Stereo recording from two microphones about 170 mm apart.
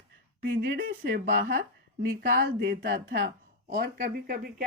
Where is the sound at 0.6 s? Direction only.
80° right.